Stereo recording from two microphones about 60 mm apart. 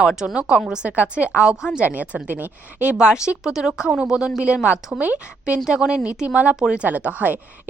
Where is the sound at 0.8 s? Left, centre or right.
Right.